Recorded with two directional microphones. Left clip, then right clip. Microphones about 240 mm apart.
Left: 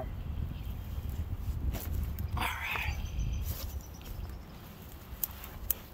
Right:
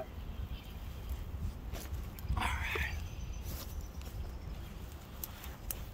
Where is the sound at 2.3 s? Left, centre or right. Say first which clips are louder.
Left 2 dB; left.